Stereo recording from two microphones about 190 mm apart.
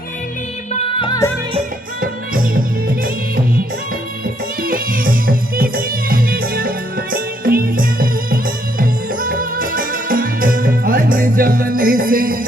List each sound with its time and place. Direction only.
0.7 s music: 30° left (ahead or behind)
2.0 s music: 50° right (ahead or behind)
4.6 s music: 50° right (ahead or behind)